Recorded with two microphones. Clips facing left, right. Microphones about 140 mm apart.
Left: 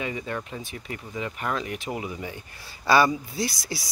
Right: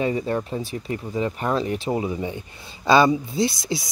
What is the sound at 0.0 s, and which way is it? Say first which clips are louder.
Speech: right 8 dB; 35° right (ahead or behind).